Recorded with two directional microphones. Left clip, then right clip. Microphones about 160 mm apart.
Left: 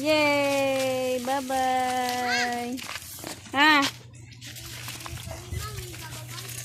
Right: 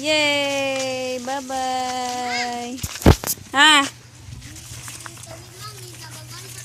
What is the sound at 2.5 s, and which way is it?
A child's voice, 20° right (ahead or behind).